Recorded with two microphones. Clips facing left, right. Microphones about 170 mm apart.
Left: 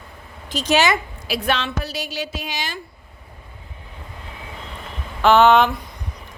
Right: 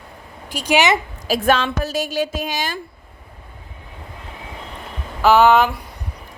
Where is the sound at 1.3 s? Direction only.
45° right (ahead or behind).